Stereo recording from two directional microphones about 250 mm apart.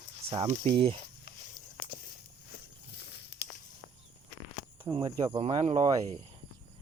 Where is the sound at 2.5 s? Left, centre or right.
Left.